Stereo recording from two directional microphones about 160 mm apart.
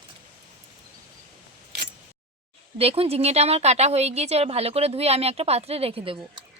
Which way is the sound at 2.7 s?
35° right (ahead or behind).